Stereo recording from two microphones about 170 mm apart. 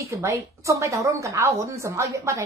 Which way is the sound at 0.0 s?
15° right (ahead or behind).